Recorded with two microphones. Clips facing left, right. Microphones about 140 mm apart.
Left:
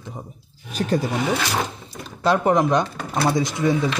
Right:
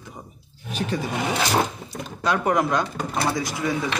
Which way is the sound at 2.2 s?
25° left (ahead or behind).